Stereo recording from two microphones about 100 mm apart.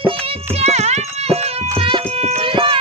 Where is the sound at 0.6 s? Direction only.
90° right.